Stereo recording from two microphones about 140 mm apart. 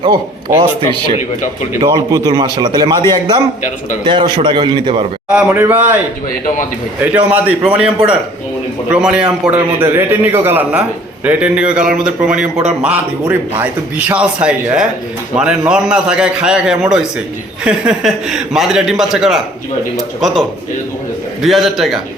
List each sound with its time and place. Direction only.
0.0 s a man's voice: 30° right (ahead or behind)
1.8 s a man's voice: 30° right (ahead or behind)
5.3 s a man's voice: 10° right (ahead or behind)
7.3 s a man's voice: 10° right (ahead or behind)
21.4 s speech: centre (ahead or behind)